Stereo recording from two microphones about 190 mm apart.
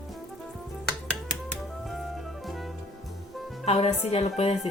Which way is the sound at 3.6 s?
35° left (ahead or behind).